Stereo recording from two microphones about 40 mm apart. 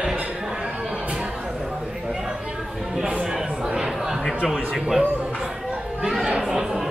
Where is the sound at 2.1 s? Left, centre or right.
Centre.